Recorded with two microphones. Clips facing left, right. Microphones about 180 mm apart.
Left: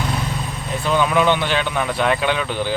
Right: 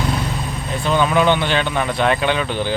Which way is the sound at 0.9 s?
Centre (ahead or behind).